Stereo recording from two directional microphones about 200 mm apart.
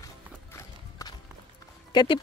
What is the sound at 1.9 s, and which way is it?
Speech, 25° left (ahead or behind).